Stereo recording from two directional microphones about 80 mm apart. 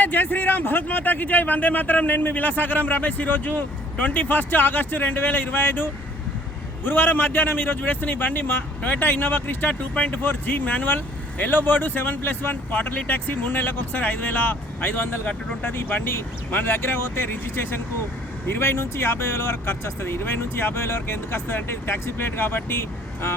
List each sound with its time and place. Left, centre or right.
0.0 s a man's voice: left